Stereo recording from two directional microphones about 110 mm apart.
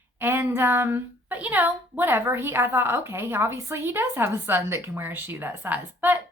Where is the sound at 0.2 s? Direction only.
20° right (ahead or behind).